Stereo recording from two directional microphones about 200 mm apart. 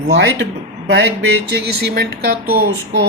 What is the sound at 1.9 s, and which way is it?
Speech, 55° right (ahead or behind).